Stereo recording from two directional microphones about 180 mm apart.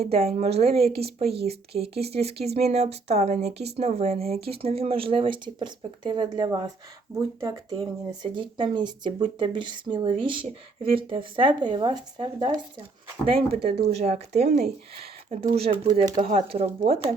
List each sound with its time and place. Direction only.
0.0 s speech: 35° right (ahead or behind)